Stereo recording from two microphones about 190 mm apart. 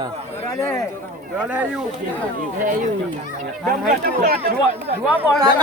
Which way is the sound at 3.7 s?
50° right (ahead or behind).